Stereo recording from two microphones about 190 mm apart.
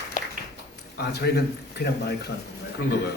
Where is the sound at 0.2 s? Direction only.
40° left (ahead or behind).